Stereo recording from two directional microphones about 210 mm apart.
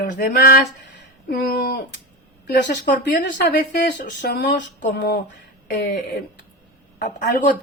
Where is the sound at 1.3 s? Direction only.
50° left (ahead or behind).